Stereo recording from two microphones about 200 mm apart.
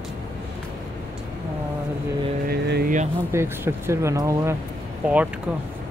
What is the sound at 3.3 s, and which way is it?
Speech, 10° right (ahead or behind).